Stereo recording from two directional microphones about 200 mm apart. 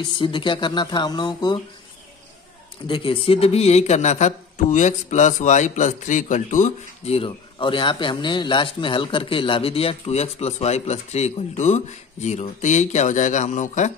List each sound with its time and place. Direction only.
0.0 s speech: 25° left (ahead or behind)
2.9 s speech: 25° left (ahead or behind)